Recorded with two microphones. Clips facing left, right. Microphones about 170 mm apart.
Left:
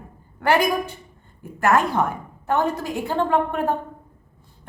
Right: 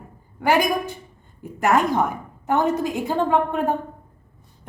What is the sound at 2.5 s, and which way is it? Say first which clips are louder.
Speech: right 2 dB; 15° right (ahead or behind).